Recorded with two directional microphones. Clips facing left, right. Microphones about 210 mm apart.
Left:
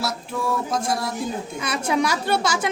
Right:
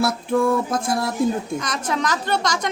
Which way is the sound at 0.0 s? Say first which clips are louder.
Right 8 dB; 55° right (ahead or behind).